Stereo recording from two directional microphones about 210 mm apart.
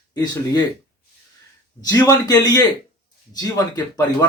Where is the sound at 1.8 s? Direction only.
15° left (ahead or behind).